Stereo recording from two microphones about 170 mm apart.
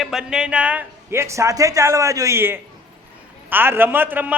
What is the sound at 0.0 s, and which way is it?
Speech, 5° right (ahead or behind).